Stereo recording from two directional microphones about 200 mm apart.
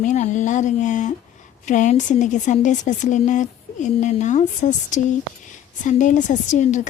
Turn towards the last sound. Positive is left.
turn(degrees=40)  # may be behind; listen again after turning